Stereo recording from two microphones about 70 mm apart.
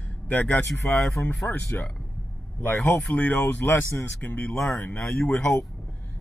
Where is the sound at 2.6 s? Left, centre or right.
Left.